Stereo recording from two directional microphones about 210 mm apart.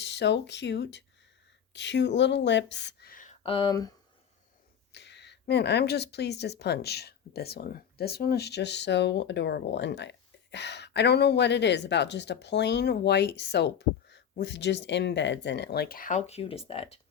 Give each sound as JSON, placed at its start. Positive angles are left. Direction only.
{"t": 0.0, "sound": "speech", "side_deg": 55}
{"t": 3.4, "sound": "speech", "side_deg": 25}
{"t": 4.9, "sound": "speech", "side_deg": 55}